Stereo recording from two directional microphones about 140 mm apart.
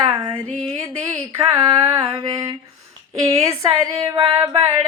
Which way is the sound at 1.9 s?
30° right (ahead or behind).